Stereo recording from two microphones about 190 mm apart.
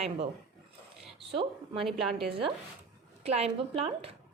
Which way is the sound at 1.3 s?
30° right (ahead or behind).